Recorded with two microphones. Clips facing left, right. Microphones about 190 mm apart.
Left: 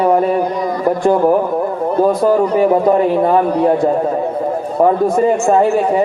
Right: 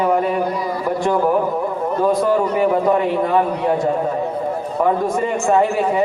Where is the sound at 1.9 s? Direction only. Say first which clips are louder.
Left 4 dB; 35° left (ahead or behind).